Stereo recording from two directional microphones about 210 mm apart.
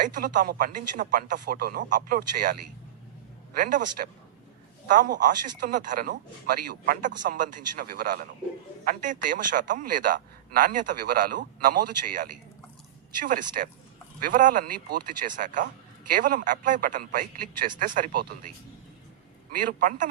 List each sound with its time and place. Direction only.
0.1 s a man's voice: 40° right (ahead or behind)
19.5 s a man's voice: 40° right (ahead or behind)